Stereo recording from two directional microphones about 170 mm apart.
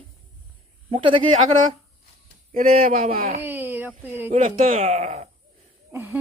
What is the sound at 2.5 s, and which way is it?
Speech, 55° right (ahead or behind).